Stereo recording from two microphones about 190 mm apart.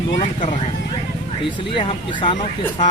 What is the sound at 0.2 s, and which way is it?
Speech, 30° left (ahead or behind).